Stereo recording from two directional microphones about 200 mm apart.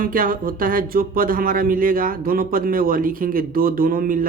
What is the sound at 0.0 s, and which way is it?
Speech, 45° right (ahead or behind).